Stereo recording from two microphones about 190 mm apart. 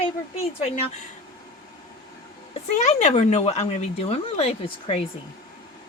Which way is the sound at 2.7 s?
40° left (ahead or behind).